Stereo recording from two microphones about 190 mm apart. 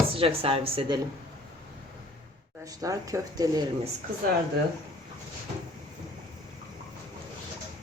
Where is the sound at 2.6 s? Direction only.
20° right (ahead or behind).